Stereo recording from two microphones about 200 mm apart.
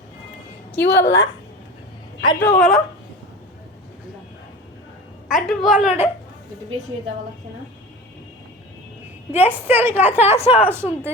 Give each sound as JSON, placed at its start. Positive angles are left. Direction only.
{"t": 0.8, "sound": "a woman's voice", "side_deg": 60}
{"t": 1.0, "sound": "a woman's voice", "side_deg": 15}
{"t": 2.6, "sound": "a woman's voice", "side_deg": 0}
{"t": 5.3, "sound": "a woman's voice", "side_deg": 0}
{"t": 9.3, "sound": "a woman's voice", "side_deg": -10}
{"t": 10.2, "sound": "a woman's voice", "side_deg": 30}
{"t": 10.6, "sound": "a woman's voice", "side_deg": -10}